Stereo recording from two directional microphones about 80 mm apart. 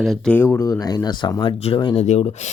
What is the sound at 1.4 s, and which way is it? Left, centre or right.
Speech, left.